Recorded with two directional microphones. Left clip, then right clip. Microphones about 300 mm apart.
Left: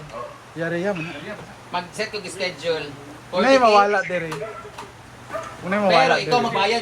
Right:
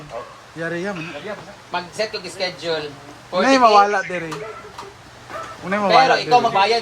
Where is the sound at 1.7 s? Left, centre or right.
Right.